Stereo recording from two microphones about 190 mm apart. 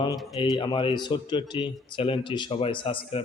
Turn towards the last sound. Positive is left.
turn(degrees=30)  # may be behind; listen again after turning